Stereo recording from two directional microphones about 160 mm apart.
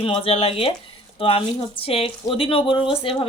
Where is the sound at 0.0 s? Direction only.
35° left (ahead or behind).